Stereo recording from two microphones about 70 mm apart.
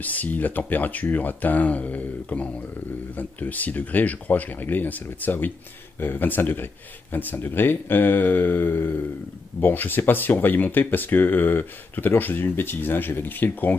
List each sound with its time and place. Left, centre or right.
0.0 s speech: left